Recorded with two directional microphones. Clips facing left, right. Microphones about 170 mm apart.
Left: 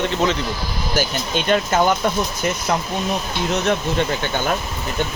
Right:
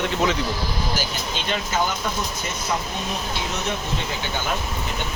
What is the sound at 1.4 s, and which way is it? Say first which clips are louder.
Speech: left 8 dB; 55° left (ahead or behind).